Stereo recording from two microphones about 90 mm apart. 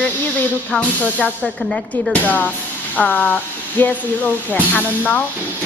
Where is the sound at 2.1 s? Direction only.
15° left (ahead or behind).